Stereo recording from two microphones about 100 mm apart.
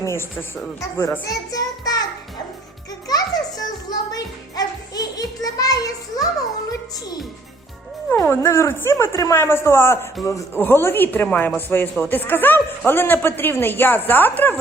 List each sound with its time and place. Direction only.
0.0 s a man's voice: 25° left (ahead or behind)
1.5 s music: 40° left (ahead or behind)
3.1 s a child's voice: 40° left (ahead or behind)
8.1 s a man's voice: 30° left (ahead or behind)